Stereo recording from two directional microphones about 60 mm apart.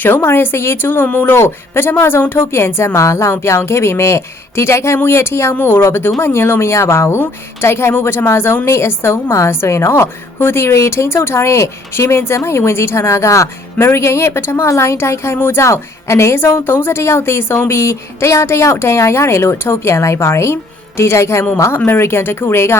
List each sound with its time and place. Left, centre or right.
0.0 s a woman's voice: left